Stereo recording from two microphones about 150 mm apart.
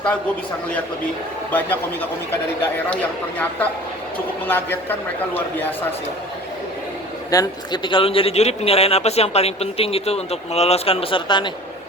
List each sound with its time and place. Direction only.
1.5 s a man's voice: 10° left (ahead or behind)
7.3 s speech: 25° left (ahead or behind)